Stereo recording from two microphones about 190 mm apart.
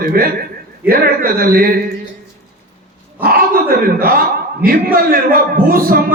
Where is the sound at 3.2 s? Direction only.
50° right (ahead or behind).